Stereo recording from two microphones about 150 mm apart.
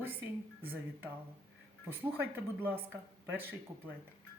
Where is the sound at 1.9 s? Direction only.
15° right (ahead or behind).